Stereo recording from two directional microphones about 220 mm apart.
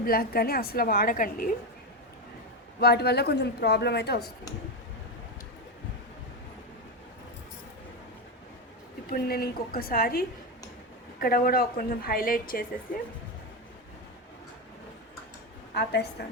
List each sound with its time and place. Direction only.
0.0 s a woman's voice: 40° left (ahead or behind)
2.8 s speech: 45° left (ahead or behind)
9.0 s a woman's voice: 45° left (ahead or behind)
15.7 s a woman's voice: 45° left (ahead or behind)